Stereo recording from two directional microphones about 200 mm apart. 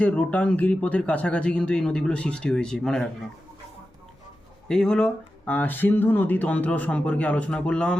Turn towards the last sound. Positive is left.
turn(degrees=5)  # may be behind; listen again after turning